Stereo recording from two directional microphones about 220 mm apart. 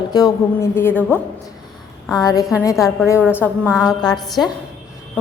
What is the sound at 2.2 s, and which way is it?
Speech, 15° left (ahead or behind).